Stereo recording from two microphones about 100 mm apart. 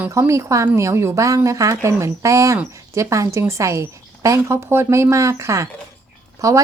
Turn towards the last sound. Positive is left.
turn(degrees=-35)  # may be behind; listen again after turning